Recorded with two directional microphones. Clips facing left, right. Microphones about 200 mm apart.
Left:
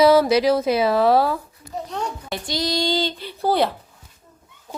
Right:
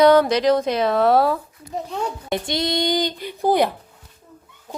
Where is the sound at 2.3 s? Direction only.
25° right (ahead or behind).